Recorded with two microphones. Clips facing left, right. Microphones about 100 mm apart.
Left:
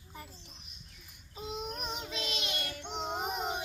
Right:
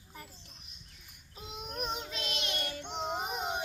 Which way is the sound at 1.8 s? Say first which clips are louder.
Right 1 dB; centre (ahead or behind).